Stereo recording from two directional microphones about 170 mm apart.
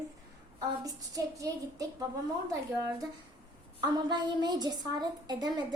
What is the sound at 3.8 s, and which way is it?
A woman's voice, 25° right (ahead or behind).